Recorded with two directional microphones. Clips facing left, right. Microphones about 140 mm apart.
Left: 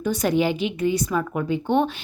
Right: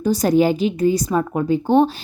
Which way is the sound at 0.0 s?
35° right (ahead or behind).